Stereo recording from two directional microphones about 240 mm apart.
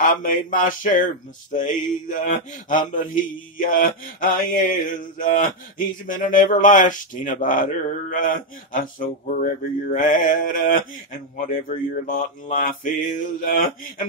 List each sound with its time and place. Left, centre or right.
0.0 s a man's voice: left